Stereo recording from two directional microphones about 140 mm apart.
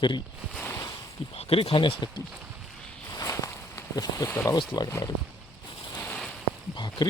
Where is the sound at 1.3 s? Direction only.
45° left (ahead or behind).